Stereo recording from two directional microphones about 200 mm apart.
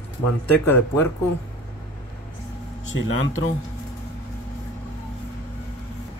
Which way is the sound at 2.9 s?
80° left.